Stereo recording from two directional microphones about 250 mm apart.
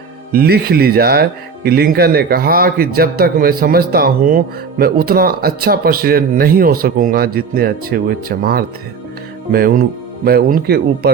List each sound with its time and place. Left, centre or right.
0.3 s speech: right